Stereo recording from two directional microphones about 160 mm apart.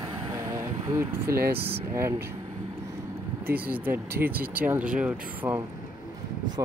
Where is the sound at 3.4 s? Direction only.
10° right (ahead or behind).